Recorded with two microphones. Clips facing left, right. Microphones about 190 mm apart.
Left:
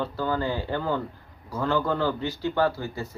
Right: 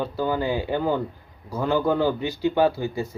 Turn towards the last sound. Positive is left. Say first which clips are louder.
# right 4 dB
turn(degrees=-15)  # may be behind; listen again after turning